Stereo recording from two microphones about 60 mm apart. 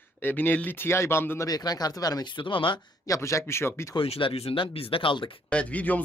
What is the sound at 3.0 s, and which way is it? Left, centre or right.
Speech, left.